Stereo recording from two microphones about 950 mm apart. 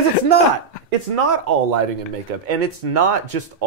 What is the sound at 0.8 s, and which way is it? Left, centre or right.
Speech, right.